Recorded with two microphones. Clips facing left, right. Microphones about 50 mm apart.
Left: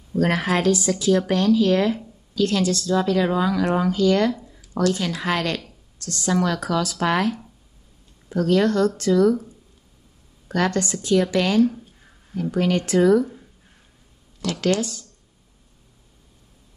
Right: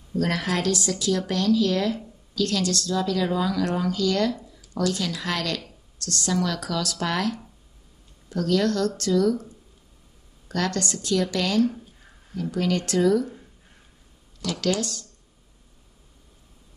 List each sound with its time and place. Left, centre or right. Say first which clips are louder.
0.1 s speech: left 4 dB; left
2.9 s speech: left 5 dB; left
10.5 s speech: left 4 dB; left
14.8 s speech: left 3 dB; centre